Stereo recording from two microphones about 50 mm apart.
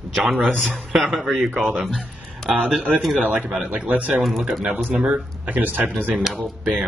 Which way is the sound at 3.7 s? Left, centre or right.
Right.